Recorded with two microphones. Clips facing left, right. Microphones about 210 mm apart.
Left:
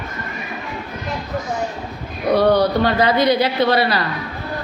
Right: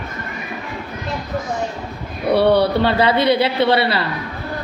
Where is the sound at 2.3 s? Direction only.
30° right (ahead or behind).